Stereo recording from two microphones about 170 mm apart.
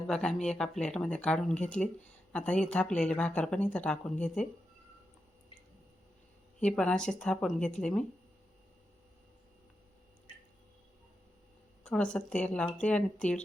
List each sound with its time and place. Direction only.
0.1 s speech: 5° left (ahead or behind)
6.6 s speech: 5° left (ahead or behind)
10.3 s drip: 30° left (ahead or behind)
11.8 s a sound: 5° left (ahead or behind)
12.1 s speech: 5° left (ahead or behind)